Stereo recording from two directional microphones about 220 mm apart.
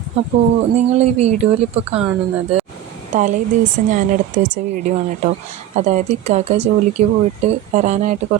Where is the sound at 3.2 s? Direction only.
35° right (ahead or behind).